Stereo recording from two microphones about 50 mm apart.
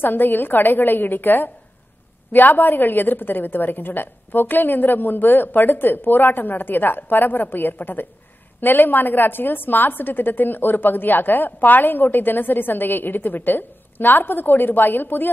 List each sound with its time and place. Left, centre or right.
0.0 s a woman's voice: left